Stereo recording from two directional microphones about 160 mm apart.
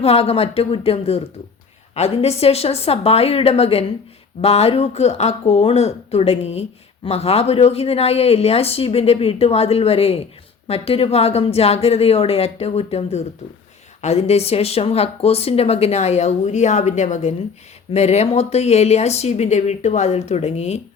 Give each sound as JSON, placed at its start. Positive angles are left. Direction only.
{"t": 0.0, "sound": "speech", "side_deg": 40}